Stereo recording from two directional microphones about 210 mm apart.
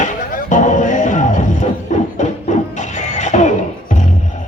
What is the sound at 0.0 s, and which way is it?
Music, 35° left (ahead or behind).